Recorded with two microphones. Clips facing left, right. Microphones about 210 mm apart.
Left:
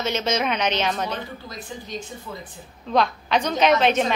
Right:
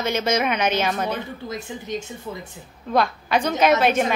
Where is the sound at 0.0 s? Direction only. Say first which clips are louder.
Right 2 dB; 10° right (ahead or behind).